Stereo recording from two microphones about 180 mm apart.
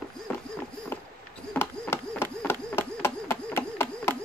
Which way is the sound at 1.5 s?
10° left (ahead or behind).